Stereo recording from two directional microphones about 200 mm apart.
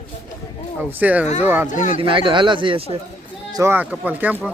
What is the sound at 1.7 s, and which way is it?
Speech, 40° left (ahead or behind).